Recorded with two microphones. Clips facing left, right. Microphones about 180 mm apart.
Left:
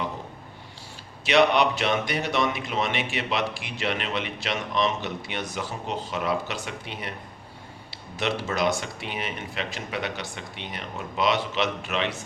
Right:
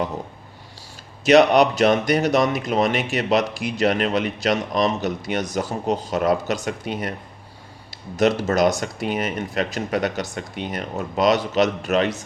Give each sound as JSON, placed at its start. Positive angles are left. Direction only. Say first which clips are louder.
{"t": 1.2, "sound": "speech", "louder": "right 6 dB", "side_deg": -40}